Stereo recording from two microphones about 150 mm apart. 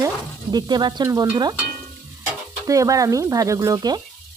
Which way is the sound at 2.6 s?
20° right (ahead or behind).